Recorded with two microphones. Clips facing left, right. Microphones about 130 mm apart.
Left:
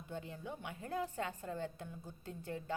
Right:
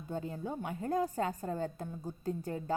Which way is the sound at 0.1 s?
40° right (ahead or behind).